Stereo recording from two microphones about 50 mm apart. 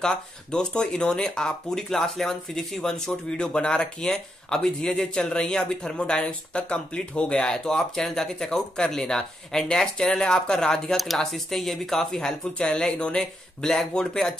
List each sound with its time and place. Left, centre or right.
0.0 s speech: centre